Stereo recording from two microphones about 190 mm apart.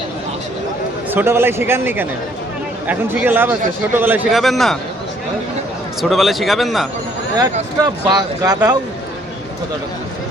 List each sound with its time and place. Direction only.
1.1 s a man's voice: 10° right (ahead or behind)
6.0 s a man's voice: centre (ahead or behind)
7.8 s speech: 20° right (ahead or behind)